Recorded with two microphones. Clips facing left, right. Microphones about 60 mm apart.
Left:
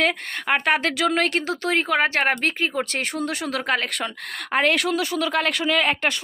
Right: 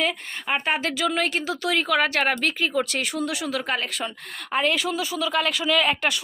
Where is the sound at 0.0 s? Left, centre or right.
Left.